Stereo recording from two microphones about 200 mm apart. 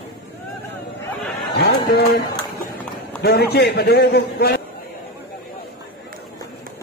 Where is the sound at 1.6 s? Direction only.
55° left (ahead or behind).